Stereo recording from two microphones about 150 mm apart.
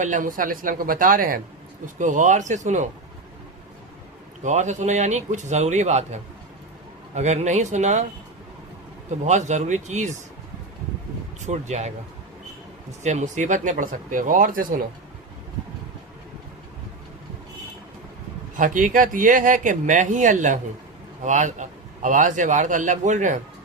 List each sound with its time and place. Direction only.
0.0 s a man's voice: 60° right (ahead or behind)
2.0 s speech: 55° right (ahead or behind)
4.4 s speech: 50° right (ahead or behind)
7.2 s speech: 50° right (ahead or behind)
9.0 s speech: 50° right (ahead or behind)
11.4 s speech: 50° right (ahead or behind)
13.0 s a man's voice: 50° right (ahead or behind)
18.5 s a man's voice: 60° right (ahead or behind)